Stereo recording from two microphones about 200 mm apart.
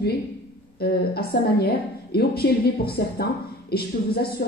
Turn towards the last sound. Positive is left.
turn(degrees=50)  # may be behind; listen again after turning